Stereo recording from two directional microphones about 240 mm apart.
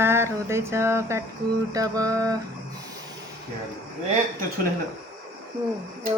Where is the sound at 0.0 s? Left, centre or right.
Centre.